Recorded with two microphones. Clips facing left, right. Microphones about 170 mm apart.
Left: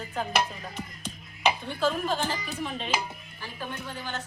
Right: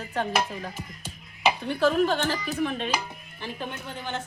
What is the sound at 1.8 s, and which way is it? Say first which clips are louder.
Speech: right 5 dB; 65° right (ahead or behind).